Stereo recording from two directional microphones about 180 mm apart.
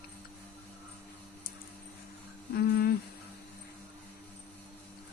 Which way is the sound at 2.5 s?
60° left (ahead or behind).